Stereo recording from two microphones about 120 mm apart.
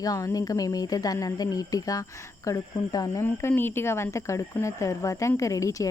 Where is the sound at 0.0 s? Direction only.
30° left (ahead or behind).